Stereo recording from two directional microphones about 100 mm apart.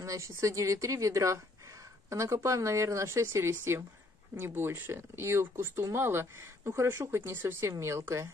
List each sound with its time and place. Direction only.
0.0 s speech: 30° right (ahead or behind)